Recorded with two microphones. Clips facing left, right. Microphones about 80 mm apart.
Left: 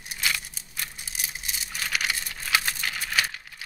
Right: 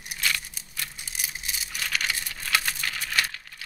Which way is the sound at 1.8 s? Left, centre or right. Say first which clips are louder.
Left 1 dB; centre.